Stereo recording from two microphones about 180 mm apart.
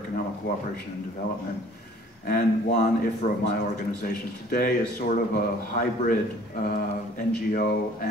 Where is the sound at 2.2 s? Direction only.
55° left (ahead or behind).